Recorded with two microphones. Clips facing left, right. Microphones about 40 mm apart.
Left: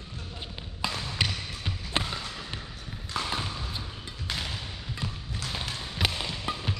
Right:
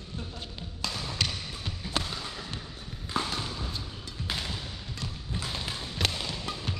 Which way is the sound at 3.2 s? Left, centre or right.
Centre.